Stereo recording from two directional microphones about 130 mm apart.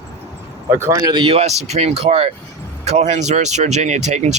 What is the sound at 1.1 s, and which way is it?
Speech, 45° right (ahead or behind).